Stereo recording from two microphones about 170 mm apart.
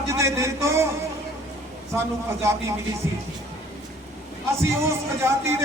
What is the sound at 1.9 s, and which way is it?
Speech, 15° right (ahead or behind).